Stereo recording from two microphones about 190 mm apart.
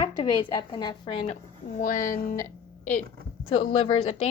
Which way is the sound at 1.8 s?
45° left (ahead or behind).